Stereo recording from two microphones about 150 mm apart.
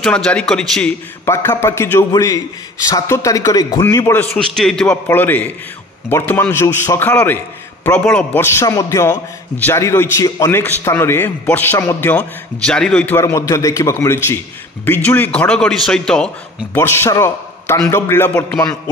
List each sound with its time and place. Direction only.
0.0 s a man's voice: 5° left (ahead or behind)
1.2 s a man's voice: 15° left (ahead or behind)
4.3 s a man's voice: centre (ahead or behind)
13.2 s a man's voice: 20° left (ahead or behind); by 16.3 s 5° left (ahead or behind)
16.7 s a man's voice: 15° left (ahead or behind)